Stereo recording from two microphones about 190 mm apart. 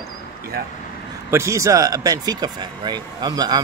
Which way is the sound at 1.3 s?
15° right (ahead or behind).